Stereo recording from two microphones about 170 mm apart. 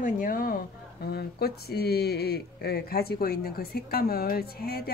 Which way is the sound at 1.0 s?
70° left (ahead or behind).